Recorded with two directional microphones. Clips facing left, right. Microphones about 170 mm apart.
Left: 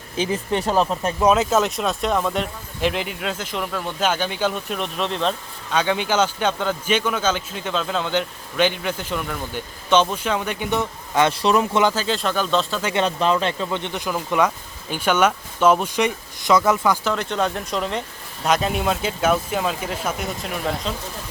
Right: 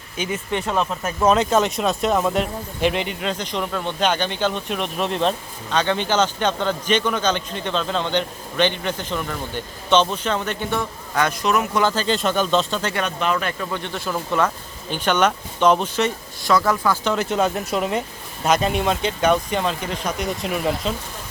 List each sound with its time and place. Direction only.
0.2 s speech: 35° left (ahead or behind)
1.2 s speech: 5° left (ahead or behind)
5.7 s speech: 10° left (ahead or behind); by 11.8 s 30° left (ahead or behind)
11.8 s speech: 15° left (ahead or behind)
12.0 s speech: centre (ahead or behind)
12.9 s speech: 30° left (ahead or behind)
17.0 s speech: centre (ahead or behind)